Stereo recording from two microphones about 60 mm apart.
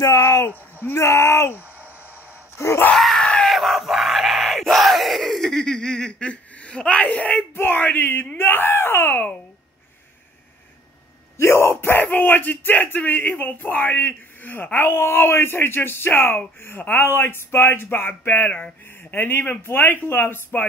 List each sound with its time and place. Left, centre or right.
0.0 s speech: left
0.9 s speech: left
2.5 s wail: left
2.9 s screaming: centre; by 7.4 s left
7.5 s speech: left
11.3 s speech: left
11.7 s speech: left
18.5 s speech: left
19.1 s speech: left